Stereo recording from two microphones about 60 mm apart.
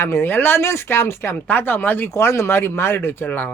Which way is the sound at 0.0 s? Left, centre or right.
Left.